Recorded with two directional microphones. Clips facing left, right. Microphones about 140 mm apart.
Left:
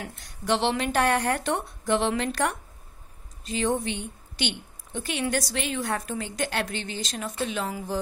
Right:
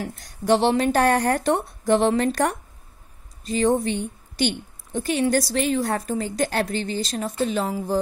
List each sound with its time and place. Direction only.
0.0 s a woman's voice: 40° right (ahead or behind)